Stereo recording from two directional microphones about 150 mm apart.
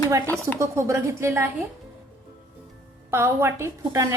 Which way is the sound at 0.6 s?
20° right (ahead or behind).